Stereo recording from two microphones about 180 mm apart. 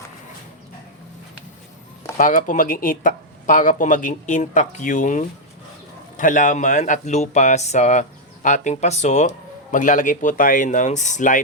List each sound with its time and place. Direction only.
2.1 s speech: 45° left (ahead or behind)